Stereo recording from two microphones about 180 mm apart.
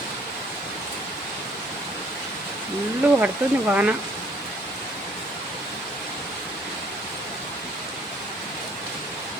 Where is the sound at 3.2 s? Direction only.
10° right (ahead or behind).